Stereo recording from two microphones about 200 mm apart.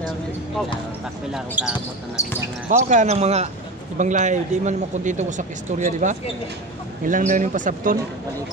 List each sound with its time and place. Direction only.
1.3 s speech: 5° right (ahead or behind)
2.2 s speech: 15° left (ahead or behind)
2.7 s a man's voice: 35° right (ahead or behind)